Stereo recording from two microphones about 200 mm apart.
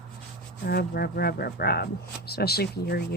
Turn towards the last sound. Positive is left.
turn(degrees=50)  # may be behind; listen again after turning